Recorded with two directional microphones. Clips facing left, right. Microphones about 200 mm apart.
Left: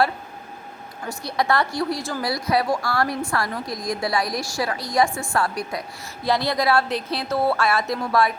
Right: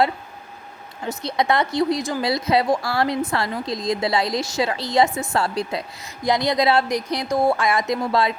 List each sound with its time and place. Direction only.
1.0 s a woman's voice: 20° right (ahead or behind)